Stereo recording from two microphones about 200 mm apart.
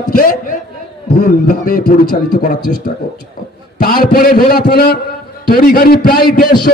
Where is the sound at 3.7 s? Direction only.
45° left (ahead or behind).